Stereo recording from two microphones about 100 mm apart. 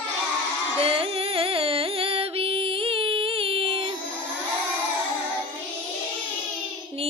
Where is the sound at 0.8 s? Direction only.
70° right (ahead or behind).